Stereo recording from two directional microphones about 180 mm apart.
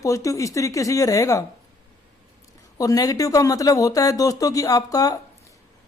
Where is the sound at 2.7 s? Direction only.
20° left (ahead or behind).